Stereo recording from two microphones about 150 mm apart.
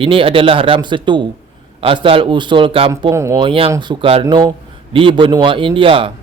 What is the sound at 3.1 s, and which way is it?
Speech, 20° right (ahead or behind).